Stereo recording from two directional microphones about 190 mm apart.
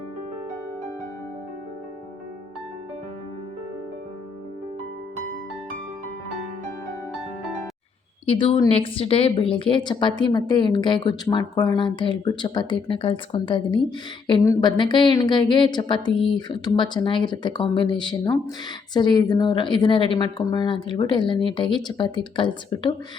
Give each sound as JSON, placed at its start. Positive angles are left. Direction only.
{"t": 8.3, "sound": "a woman's voice", "side_deg": 25}